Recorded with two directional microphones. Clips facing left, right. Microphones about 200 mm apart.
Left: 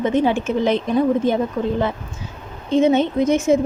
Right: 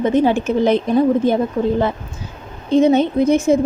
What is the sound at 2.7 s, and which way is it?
Speech, 35° right (ahead or behind).